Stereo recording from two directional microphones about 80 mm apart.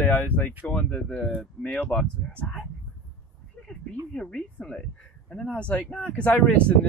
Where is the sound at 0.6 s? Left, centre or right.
Centre.